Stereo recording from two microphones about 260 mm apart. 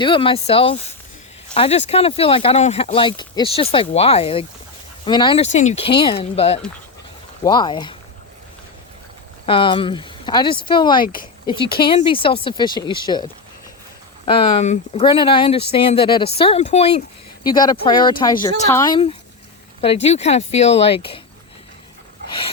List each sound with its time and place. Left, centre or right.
0.0 s speech: centre
9.5 s speech: centre
14.3 s speech: left
22.3 s a sound: left